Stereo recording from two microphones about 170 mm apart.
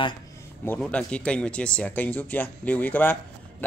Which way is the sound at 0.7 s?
5° left (ahead or behind).